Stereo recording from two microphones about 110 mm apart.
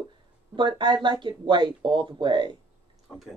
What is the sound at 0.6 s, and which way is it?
A woman's voice, 45° right (ahead or behind).